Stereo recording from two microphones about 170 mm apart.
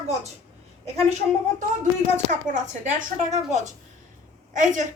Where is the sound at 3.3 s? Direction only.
45° right (ahead or behind).